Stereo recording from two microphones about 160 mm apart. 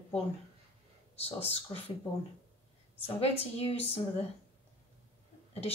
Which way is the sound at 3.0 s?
40° left (ahead or behind).